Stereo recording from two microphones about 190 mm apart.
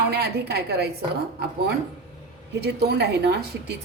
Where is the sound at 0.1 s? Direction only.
55° right (ahead or behind).